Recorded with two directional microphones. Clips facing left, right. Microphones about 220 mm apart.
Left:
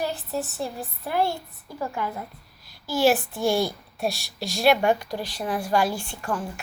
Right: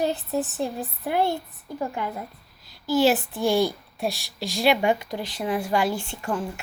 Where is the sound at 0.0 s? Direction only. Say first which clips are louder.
Right 4 dB; 20° right (ahead or behind).